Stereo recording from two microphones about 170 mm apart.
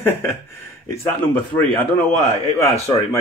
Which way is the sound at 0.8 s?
10° left (ahead or behind).